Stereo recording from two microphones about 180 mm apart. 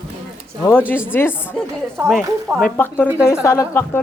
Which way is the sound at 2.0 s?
Centre (ahead or behind).